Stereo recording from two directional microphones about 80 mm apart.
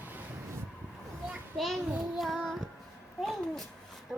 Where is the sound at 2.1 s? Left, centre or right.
Centre.